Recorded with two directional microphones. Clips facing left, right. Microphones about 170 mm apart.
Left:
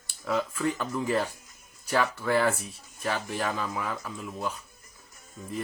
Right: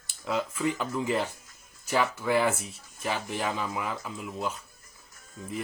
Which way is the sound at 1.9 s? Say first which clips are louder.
Even; 15° right (ahead or behind).